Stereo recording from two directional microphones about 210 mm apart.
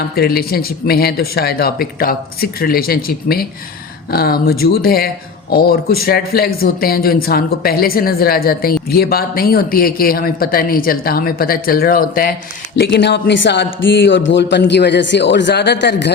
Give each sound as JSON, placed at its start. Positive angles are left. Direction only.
{"t": 0.2, "sound": "speech", "side_deg": 45}
{"t": 12.8, "sound": "a man's voice", "side_deg": 55}